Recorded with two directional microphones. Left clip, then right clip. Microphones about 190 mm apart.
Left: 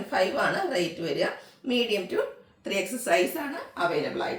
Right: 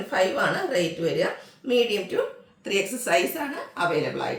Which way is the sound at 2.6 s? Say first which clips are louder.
Right 3 dB; 15° right (ahead or behind).